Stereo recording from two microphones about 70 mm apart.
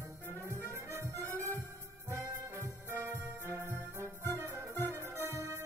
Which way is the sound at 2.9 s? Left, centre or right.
Right.